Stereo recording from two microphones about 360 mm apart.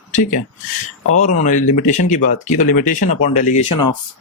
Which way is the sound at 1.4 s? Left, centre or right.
Left.